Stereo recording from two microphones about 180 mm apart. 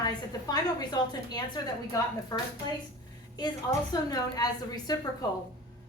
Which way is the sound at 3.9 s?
20° left (ahead or behind).